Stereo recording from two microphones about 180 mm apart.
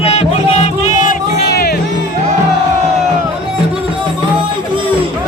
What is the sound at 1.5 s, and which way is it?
Music, 60° left (ahead or behind).